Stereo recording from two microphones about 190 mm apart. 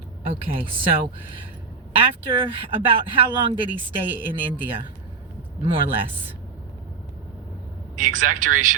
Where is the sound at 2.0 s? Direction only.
25° right (ahead or behind).